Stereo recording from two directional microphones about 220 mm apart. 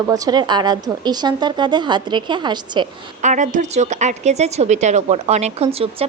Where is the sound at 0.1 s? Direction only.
20° right (ahead or behind).